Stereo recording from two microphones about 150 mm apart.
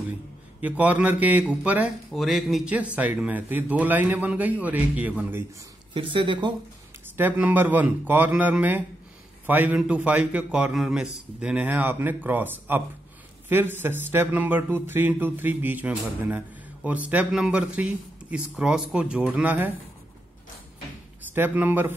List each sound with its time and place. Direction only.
0.6 s speech: 10° right (ahead or behind)
5.9 s speech: 35° right (ahead or behind)
7.2 s speech: 10° right (ahead or behind)
21.3 s speech: 10° right (ahead or behind)